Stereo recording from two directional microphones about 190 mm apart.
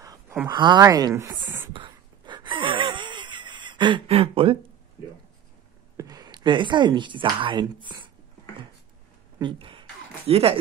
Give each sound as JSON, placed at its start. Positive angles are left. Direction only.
{"t": 0.5, "sound": "speech", "side_deg": -25}
{"t": 1.7, "sound": "wheeze", "side_deg": -25}
{"t": 5.9, "sound": "speech", "side_deg": -20}
{"t": 9.4, "sound": "a sound", "side_deg": -25}